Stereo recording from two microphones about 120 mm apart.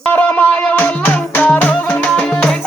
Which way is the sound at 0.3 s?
10° left (ahead or behind).